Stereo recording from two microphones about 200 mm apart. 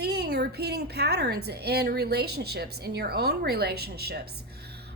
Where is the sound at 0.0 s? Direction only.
55° right (ahead or behind).